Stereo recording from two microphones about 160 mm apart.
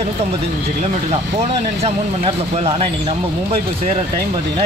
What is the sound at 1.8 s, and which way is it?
Speech, 40° right (ahead or behind).